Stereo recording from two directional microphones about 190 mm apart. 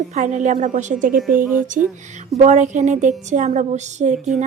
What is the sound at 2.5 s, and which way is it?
A woman's voice, 40° right (ahead or behind).